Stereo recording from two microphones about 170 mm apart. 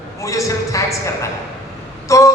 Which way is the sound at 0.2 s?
20° left (ahead or behind).